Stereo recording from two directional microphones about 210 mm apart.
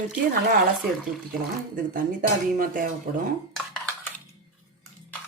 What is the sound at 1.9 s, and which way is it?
Speech, 40° right (ahead or behind).